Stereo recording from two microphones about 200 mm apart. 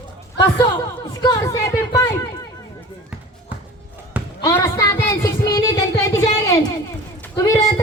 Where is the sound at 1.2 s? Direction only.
15° left (ahead or behind).